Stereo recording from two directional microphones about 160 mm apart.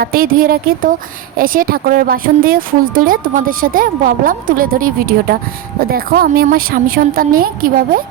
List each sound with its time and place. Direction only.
0.0 s a woman's voice: 65° right (ahead or behind)